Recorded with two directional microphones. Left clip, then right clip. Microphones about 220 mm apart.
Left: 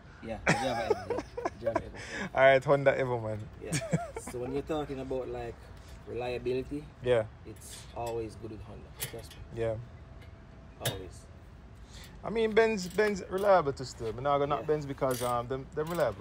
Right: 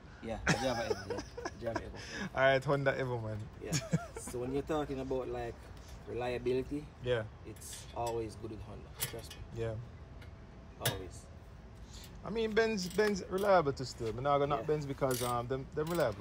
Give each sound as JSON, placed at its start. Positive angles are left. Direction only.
{"t": 0.2, "sound": "speech", "side_deg": -5}
{"t": 0.9, "sound": "speech", "side_deg": -15}
{"t": 4.4, "sound": "speech", "side_deg": -5}
{"t": 7.0, "sound": "speech", "side_deg": -15}
{"t": 7.9, "sound": "speech", "side_deg": 0}
{"t": 9.6, "sound": "speech", "side_deg": -20}
{"t": 12.2, "sound": "speech", "side_deg": -20}
{"t": 15.7, "sound": "speech", "side_deg": -15}